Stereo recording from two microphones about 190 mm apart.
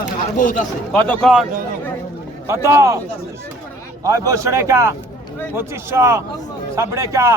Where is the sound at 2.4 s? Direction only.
15° right (ahead or behind).